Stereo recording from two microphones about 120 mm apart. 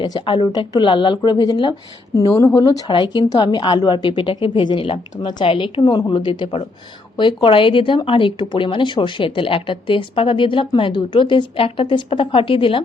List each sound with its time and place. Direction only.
0.0 s a woman's voice: 40° left (ahead or behind)
2.9 s a woman's voice: 40° left (ahead or behind)